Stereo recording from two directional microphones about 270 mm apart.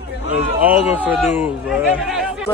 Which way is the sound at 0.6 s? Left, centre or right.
Centre.